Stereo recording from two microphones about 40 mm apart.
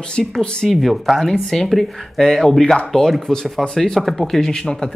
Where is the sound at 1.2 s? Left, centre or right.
Centre.